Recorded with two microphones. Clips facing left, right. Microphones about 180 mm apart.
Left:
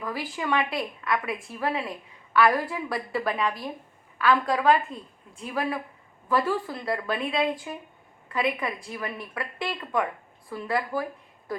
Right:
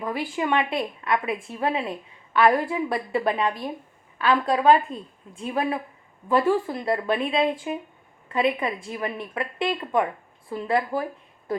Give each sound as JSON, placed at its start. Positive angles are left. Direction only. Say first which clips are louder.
{"t": 0.0, "sound": "a woman's voice", "louder": "right 4 dB", "side_deg": -20}